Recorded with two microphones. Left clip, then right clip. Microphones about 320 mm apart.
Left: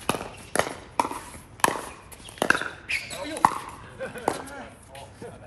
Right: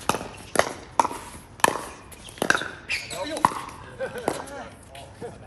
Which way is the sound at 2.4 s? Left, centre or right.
Right.